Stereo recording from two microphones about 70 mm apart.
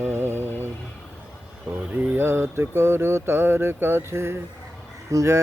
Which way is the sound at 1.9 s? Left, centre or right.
Right.